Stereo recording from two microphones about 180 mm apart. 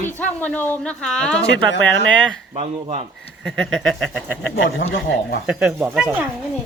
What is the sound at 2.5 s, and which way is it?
Speech, 35° right (ahead or behind).